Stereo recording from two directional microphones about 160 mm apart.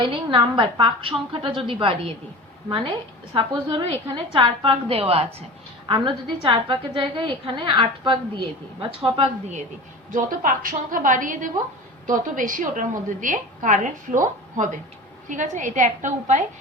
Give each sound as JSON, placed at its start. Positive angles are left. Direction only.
{"t": 0.0, "sound": "a woman's voice", "side_deg": -30}
{"t": 10.1, "sound": "a woman's voice", "side_deg": -55}